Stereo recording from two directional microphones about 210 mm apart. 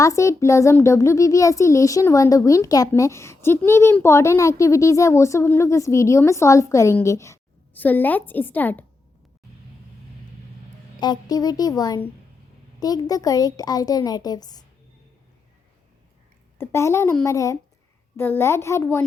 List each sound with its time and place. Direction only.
0.0 s a child's voice: 15° left (ahead or behind)
11.0 s a woman's voice: 20° left (ahead or behind)
16.6 s a child's voice: 10° left (ahead or behind)